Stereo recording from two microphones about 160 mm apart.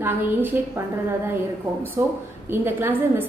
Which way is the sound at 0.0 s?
15° right (ahead or behind).